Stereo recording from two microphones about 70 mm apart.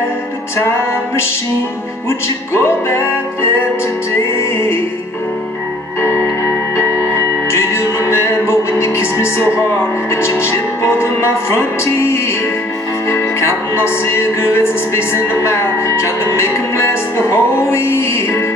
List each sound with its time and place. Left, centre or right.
0.6 s music: left
4.4 s music: left
5.9 s music: left